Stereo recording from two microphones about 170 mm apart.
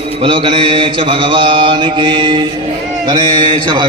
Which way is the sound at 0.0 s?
35° right (ahead or behind).